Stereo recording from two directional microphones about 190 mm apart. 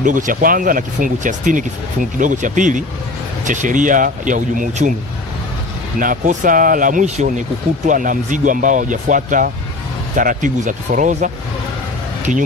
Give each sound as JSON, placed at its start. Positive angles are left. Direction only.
{"t": 0.0, "sound": "speech", "side_deg": -45}
{"t": 5.9, "sound": "speech", "side_deg": -45}